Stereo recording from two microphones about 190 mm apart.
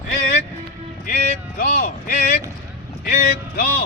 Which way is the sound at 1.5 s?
50° left (ahead or behind).